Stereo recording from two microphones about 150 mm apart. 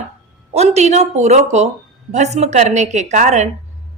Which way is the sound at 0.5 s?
45° right (ahead or behind).